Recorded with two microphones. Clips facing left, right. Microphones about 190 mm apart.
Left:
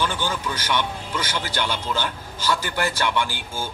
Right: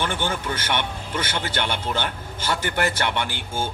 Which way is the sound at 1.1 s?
25° right (ahead or behind).